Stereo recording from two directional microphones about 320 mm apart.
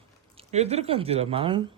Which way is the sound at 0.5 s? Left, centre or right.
Centre.